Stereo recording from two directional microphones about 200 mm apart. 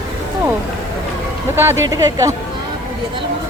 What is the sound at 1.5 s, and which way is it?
Speech, 10° right (ahead or behind).